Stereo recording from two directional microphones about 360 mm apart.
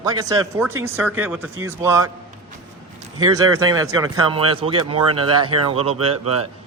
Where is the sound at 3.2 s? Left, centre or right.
Centre.